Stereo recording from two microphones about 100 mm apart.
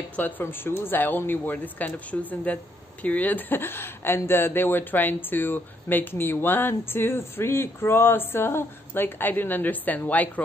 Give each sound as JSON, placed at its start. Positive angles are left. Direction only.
{"t": 0.1, "sound": "speech", "side_deg": 20}